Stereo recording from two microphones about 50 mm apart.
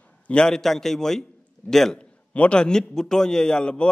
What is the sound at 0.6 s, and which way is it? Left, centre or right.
A man's voice, centre.